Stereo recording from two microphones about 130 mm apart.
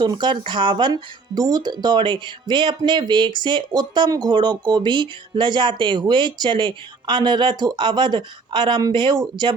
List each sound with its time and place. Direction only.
0.0 s speech: 35° right (ahead or behind)